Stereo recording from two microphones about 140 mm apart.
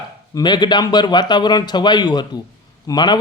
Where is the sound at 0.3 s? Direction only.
30° left (ahead or behind).